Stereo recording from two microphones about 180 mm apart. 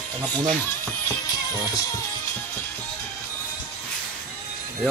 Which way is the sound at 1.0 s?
20° left (ahead or behind).